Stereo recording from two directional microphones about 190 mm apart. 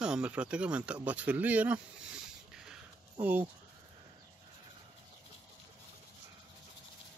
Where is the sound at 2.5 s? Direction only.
5° right (ahead or behind).